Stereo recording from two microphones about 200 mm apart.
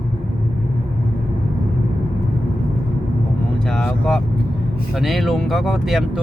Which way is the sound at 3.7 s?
5° left (ahead or behind).